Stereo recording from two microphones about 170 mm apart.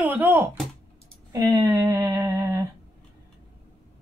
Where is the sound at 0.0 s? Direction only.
10° right (ahead or behind).